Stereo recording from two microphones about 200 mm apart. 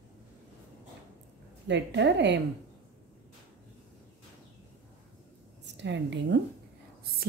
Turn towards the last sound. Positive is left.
turn(degrees=-60)  # may be behind; listen again after turning